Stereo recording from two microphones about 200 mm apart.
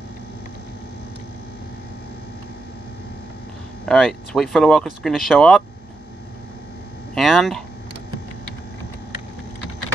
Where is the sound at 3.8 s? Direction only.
Centre (ahead or behind).